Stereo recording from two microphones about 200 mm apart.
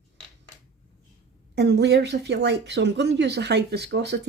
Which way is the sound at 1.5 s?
55° right (ahead or behind).